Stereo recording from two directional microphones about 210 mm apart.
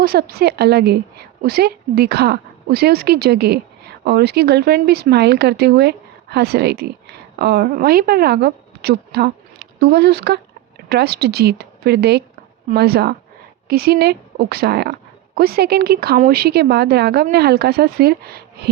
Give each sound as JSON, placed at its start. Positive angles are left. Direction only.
{"t": 0.0, "sound": "a woman's voice", "side_deg": -45}